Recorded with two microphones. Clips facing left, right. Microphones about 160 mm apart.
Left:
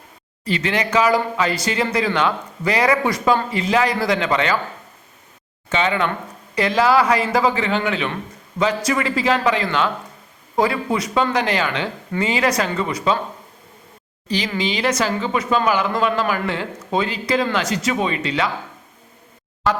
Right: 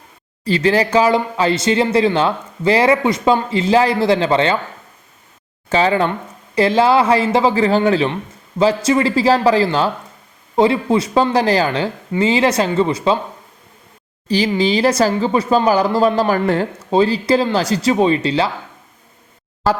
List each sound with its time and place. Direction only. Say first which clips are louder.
0.4 s speech: right 7 dB; 35° right (ahead or behind)
5.6 s speech: right 5 dB; 35° right (ahead or behind)
14.3 s speech: right 7 dB; 30° right (ahead or behind)